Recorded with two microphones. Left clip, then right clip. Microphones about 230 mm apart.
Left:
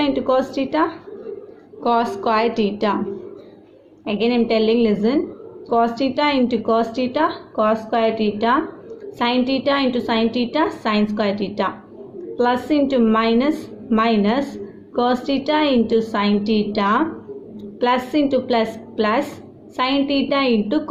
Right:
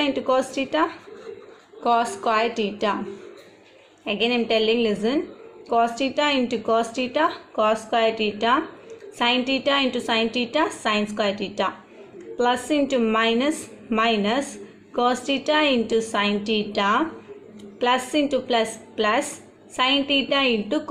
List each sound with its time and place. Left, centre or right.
0.0 s speech: right
4.0 s a woman's voice: right